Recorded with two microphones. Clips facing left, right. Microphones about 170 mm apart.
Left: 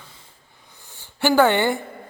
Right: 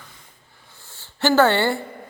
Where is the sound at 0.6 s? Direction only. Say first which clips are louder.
Left 1 dB; 15° left (ahead or behind).